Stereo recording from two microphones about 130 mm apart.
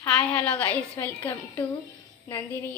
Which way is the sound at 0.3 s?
10° left (ahead or behind).